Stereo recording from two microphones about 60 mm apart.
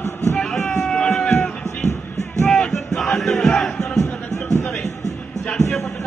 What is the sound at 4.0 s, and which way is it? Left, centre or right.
Music, left.